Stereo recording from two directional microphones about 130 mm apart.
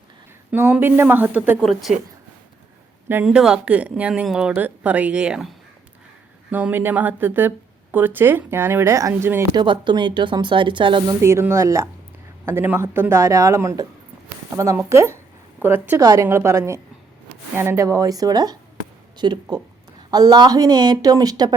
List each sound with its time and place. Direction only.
0.5 s a woman's voice: 15° right (ahead or behind)
1.6 s speech: centre (ahead or behind)
3.2 s a woman's voice: 5° right (ahead or behind); by 9.5 s 20° right (ahead or behind)
9.6 s speech: 35° right (ahead or behind)
11.2 s a woman's voice: 20° right (ahead or behind)